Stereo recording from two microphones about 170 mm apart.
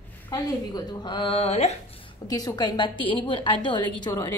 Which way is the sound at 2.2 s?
25° left (ahead or behind).